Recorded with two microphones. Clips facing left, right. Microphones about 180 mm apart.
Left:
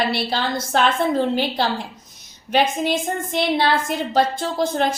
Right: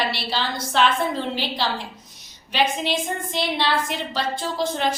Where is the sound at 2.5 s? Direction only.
50° left (ahead or behind).